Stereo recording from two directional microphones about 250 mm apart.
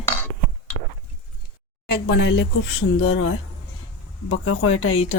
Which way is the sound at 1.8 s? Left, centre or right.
Left.